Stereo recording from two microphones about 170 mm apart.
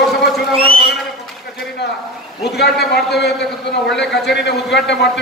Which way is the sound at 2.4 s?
75° left (ahead or behind).